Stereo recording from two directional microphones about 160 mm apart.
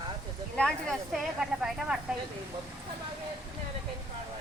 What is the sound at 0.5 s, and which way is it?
Speech, 5° left (ahead or behind).